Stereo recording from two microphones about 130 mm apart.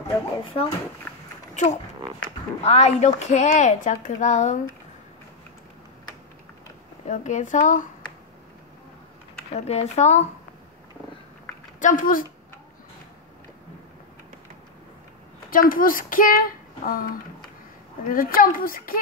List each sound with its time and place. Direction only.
0.5 s speech: 50° left (ahead or behind)
1.5 s a woman's voice: 65° left (ahead or behind)
7.1 s a woman's voice: 75° left (ahead or behind)
9.7 s speech: 60° left (ahead or behind)
11.8 s a child's voice: 90° left
15.7 s a child's voice: 90° left